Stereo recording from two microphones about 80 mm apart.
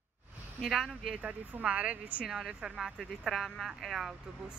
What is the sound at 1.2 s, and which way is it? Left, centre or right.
Speech, centre.